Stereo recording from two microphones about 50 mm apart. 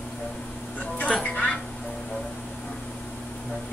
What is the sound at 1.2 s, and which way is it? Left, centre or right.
Music, left.